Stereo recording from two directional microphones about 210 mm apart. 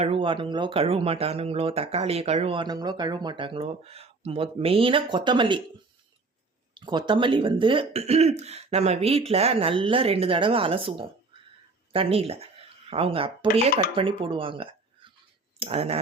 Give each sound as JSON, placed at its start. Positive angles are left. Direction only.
{"t": 0.0, "sound": "speech", "side_deg": -25}
{"t": 6.7, "sound": "speech", "side_deg": -20}